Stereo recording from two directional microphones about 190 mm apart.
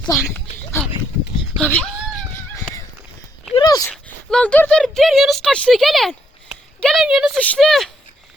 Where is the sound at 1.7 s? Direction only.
5° left (ahead or behind).